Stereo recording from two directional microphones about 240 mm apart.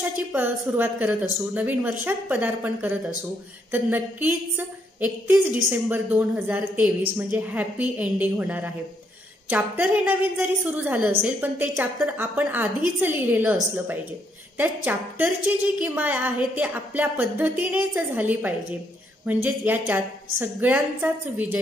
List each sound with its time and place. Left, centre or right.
0.3 s a woman's voice: centre